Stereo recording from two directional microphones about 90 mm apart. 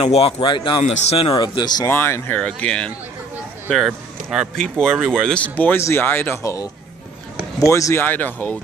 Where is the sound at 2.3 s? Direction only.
15° left (ahead or behind).